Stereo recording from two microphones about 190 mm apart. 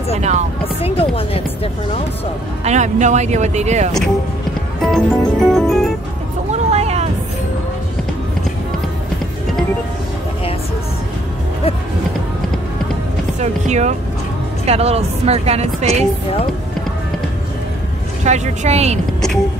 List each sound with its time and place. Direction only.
0.1 s speech: 35° right (ahead or behind)
0.7 s speech: 30° left (ahead or behind)
2.6 s speech: 40° right (ahead or behind)
4.8 s music: centre (ahead or behind)
6.5 s vehicle: 35° right (ahead or behind)
13.4 s speech: 40° right (ahead or behind)
18.2 s speech: 40° right (ahead or behind)